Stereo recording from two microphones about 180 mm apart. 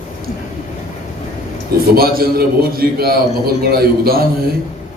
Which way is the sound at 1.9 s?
55° right (ahead or behind).